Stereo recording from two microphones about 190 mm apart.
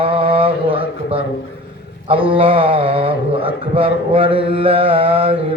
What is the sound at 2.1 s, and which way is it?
Mantra, 30° right (ahead or behind).